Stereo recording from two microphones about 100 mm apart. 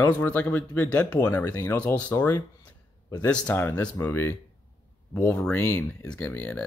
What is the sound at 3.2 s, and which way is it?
A man's voice, 15° left (ahead or behind).